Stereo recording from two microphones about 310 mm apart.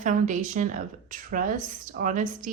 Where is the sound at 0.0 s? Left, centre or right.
Right.